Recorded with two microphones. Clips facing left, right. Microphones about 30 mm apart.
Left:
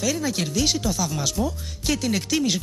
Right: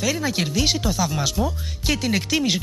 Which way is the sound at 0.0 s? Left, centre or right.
Centre.